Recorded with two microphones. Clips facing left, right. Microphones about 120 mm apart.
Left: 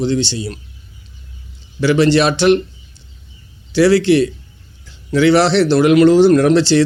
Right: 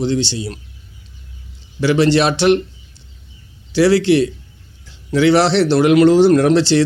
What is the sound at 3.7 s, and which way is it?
A man's voice, 25° right (ahead or behind).